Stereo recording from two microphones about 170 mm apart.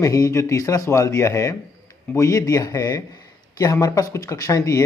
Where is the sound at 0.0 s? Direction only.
20° left (ahead or behind).